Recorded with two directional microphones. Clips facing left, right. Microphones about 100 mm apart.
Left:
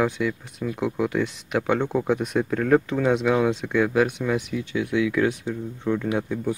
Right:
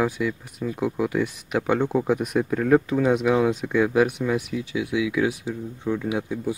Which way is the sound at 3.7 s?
15° right (ahead or behind).